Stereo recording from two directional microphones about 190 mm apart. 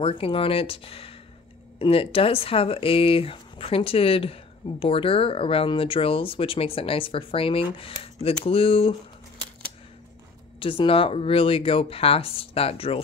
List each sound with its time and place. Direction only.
0.0 s speech: 30° left (ahead or behind)
10.6 s speech: 30° left (ahead or behind)